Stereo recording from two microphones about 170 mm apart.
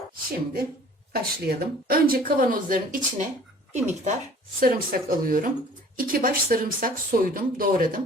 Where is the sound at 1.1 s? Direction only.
60° right (ahead or behind).